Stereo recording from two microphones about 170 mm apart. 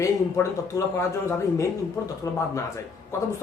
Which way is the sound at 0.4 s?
15° left (ahead or behind).